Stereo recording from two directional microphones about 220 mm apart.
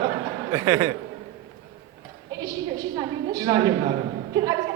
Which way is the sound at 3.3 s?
15° right (ahead or behind).